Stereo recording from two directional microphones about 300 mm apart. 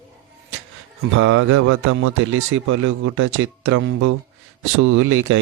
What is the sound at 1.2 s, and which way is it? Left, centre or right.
A man's voice, right.